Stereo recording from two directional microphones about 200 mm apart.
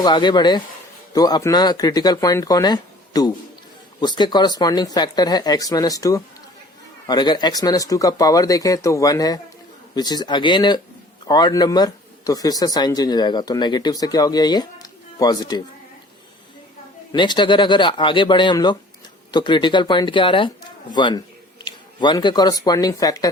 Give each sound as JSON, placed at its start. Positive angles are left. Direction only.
{"t": 0.0, "sound": "speech", "side_deg": 20}
{"t": 17.1, "sound": "speech", "side_deg": 20}